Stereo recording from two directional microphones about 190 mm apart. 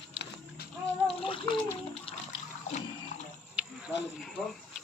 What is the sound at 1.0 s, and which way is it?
Water, 25° left (ahead or behind).